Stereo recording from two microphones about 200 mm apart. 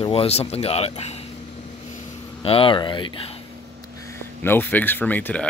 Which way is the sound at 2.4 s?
25° left (ahead or behind).